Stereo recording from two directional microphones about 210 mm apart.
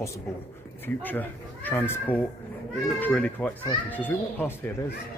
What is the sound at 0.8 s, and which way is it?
Speech, 10° left (ahead or behind).